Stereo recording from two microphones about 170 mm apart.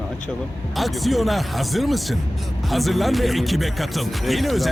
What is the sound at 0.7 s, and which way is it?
Speech, centre (ahead or behind).